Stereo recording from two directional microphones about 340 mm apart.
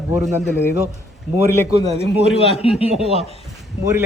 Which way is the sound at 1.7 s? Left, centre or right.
Centre.